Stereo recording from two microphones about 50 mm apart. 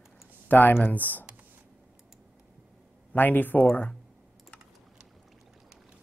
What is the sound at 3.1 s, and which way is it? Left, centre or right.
Speech, left.